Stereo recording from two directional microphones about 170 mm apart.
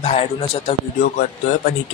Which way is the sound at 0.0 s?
35° left (ahead or behind).